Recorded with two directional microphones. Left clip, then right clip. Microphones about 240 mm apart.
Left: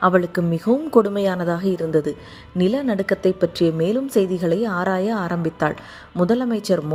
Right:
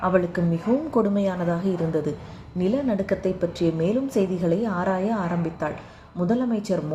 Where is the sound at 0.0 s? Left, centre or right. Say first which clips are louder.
Left 5 dB; left.